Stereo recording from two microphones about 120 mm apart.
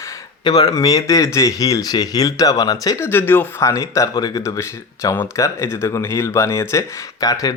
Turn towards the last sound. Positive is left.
turn(degrees=30)  # may be behind; listen again after turning